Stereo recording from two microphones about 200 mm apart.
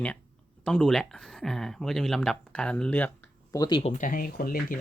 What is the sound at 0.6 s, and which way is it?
Speech, 5° left (ahead or behind).